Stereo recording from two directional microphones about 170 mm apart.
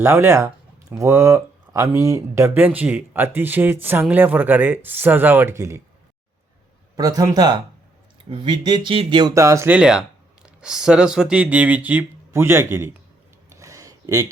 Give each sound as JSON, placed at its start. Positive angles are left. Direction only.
{"t": 0.0, "sound": "speech", "side_deg": -15}
{"t": 6.9, "sound": "speech", "side_deg": -20}
{"t": 13.5, "sound": "a sound", "side_deg": -20}